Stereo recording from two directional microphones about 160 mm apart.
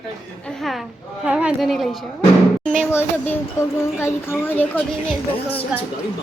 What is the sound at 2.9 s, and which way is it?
Speech, 15° left (ahead or behind).